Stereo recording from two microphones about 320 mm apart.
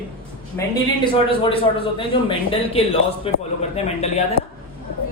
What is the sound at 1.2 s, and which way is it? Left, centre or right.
Speech, centre.